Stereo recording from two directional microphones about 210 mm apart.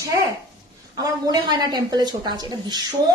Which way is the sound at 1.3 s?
20° right (ahead or behind).